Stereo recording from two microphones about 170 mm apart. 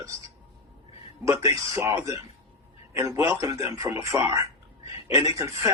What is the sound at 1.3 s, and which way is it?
Speech, 20° right (ahead or behind).